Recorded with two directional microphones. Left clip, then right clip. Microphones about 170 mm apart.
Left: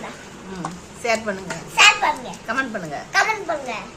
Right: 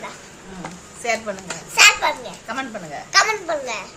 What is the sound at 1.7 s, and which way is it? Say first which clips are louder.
Children playing: right 1 dB; 80° right.